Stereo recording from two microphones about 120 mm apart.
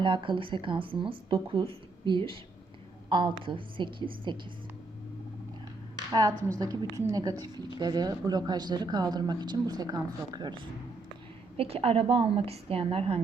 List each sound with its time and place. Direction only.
0.0 s speech: 45° right (ahead or behind)
6.1 s a woman's voice: 35° right (ahead or behind)
11.5 s speech: 55° right (ahead or behind)